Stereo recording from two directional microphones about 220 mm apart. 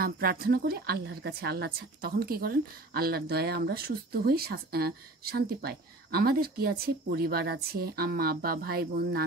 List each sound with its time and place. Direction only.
0.0 s a woman's voice: 40° right (ahead or behind)